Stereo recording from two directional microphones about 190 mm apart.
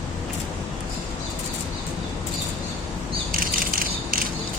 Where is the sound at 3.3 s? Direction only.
50° right (ahead or behind).